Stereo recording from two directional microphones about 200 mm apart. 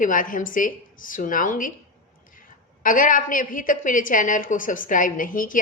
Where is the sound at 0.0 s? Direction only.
40° left (ahead or behind).